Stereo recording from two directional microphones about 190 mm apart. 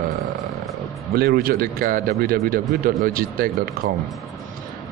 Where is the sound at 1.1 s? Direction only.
55° right (ahead or behind).